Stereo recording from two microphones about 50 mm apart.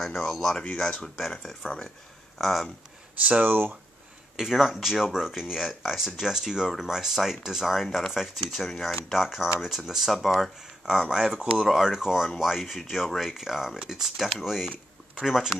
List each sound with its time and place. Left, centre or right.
0.0 s speech: centre
3.4 s speech: right
4.4 s speech: centre